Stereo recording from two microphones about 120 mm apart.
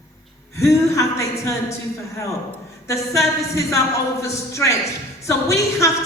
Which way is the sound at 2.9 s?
25° left (ahead or behind).